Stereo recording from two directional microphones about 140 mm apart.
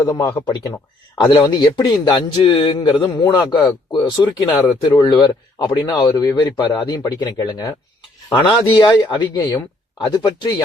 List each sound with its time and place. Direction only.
0.0 s a man's voice: 25° left (ahead or behind)